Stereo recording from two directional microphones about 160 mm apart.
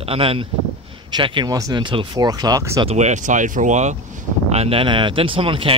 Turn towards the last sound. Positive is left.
turn(degrees=-35)  # may be behind; listen again after turning